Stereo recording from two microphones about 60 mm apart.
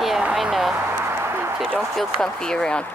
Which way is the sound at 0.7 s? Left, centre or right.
Right.